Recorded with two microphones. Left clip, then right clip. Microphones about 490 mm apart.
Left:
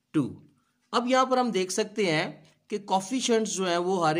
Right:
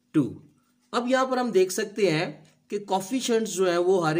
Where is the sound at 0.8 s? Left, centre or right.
Left.